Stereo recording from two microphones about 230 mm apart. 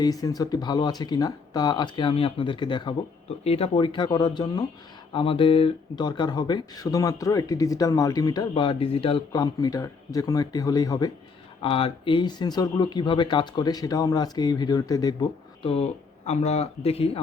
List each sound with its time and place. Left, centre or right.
0.0 s speech: centre